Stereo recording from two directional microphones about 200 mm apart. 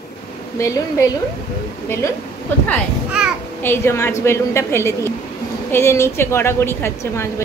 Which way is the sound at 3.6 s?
10° left (ahead or behind).